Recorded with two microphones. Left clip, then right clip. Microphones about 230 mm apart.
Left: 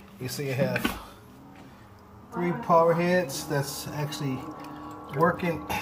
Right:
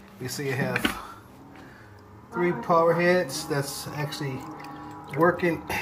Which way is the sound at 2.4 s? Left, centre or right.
Centre.